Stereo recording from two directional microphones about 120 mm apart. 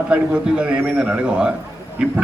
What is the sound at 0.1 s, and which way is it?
A man's voice, 10° right (ahead or behind).